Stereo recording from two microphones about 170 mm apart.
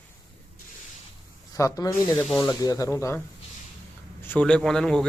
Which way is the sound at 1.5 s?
20° left (ahead or behind).